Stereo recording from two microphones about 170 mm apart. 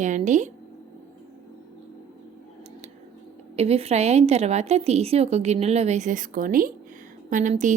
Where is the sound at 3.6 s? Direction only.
35° right (ahead or behind).